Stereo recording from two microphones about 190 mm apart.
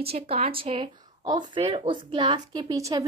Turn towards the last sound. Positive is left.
turn(degrees=-20)  # may be behind; listen again after turning